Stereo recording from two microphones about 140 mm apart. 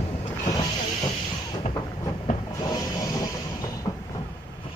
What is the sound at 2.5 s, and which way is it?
Train, 25° left (ahead or behind).